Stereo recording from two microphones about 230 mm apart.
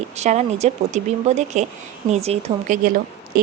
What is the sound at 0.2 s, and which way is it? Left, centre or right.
A woman's voice, right.